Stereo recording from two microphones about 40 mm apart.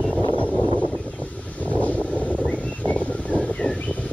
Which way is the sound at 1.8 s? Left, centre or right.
Left.